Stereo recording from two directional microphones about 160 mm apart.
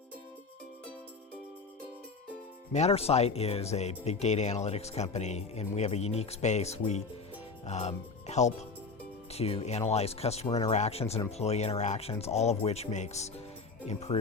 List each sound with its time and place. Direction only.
2.7 s speech: 40° left (ahead or behind)